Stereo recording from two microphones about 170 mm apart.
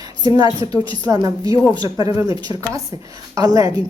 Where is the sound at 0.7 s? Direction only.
20° right (ahead or behind).